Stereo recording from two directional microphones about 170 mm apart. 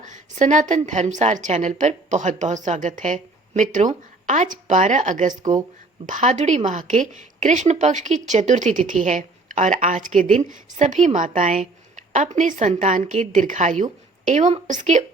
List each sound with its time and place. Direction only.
0.0 s a woman's voice: 45° right (ahead or behind)